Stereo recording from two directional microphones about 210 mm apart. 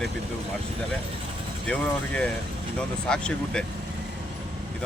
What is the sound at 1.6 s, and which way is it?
Speech, 5° left (ahead or behind).